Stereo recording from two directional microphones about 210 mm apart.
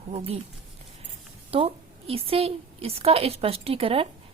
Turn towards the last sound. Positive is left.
turn(degrees=-25)  # may be behind; listen again after turning